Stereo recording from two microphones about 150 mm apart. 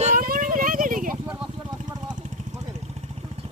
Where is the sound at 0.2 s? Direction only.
65° right (ahead or behind).